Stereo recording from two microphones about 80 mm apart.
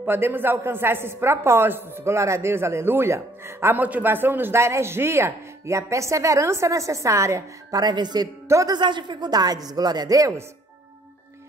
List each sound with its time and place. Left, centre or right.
0.0 s speech: right
3.8 s speech: right
7.8 s speech: right
8.6 s speech: right